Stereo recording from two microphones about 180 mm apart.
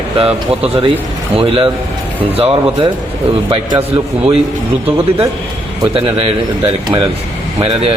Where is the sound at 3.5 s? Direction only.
30° right (ahead or behind).